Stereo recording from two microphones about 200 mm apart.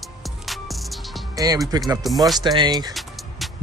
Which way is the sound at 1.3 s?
20° right (ahead or behind).